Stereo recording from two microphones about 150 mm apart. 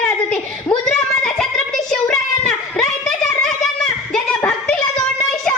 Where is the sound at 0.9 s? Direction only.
5° left (ahead or behind).